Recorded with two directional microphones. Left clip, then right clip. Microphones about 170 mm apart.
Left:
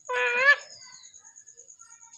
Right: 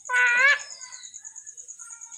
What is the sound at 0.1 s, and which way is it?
Dog, 45° left (ahead or behind).